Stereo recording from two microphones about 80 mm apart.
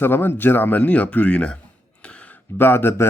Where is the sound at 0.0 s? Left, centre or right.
Left.